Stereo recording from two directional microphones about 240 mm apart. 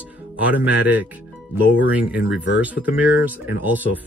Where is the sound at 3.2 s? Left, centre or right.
Centre.